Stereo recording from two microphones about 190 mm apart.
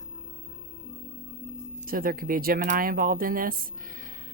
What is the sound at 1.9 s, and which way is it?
Speech, 50° right (ahead or behind).